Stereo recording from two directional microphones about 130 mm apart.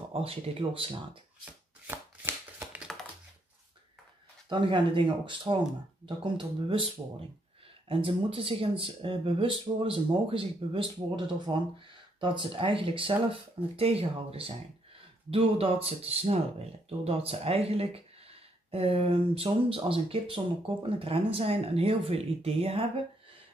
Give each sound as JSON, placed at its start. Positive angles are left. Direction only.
{"t": 0.1, "sound": "speech", "side_deg": -45}
{"t": 1.4, "sound": "shuffling cards", "side_deg": -15}
{"t": 4.5, "sound": "speech", "side_deg": -35}
{"t": 7.9, "sound": "speech", "side_deg": -45}